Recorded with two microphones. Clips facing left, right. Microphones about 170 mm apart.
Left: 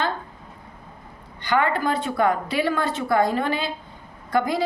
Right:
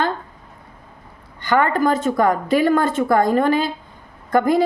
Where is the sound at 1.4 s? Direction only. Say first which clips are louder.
Right 4 dB; 45° right (ahead or behind).